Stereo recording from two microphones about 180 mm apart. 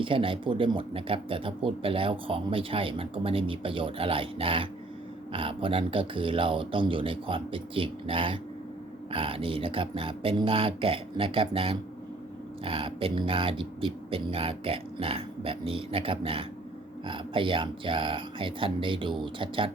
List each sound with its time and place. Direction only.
0.0 s speech: 30° right (ahead or behind)